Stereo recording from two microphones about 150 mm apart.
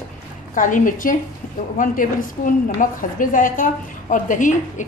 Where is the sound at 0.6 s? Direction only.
60° left (ahead or behind).